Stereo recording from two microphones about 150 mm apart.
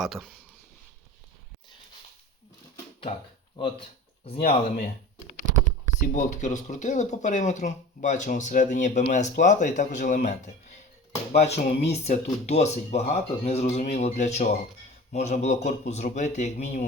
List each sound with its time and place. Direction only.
0.0 s speech: centre (ahead or behind)
4.4 s speech: 45° left (ahead or behind)
6.0 s speech: 55° left (ahead or behind)